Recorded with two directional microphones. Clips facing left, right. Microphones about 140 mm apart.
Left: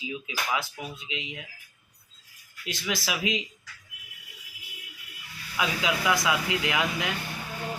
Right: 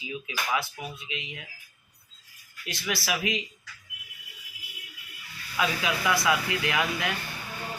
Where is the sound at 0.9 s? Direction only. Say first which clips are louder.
Left 1 dB; 20° left (ahead or behind).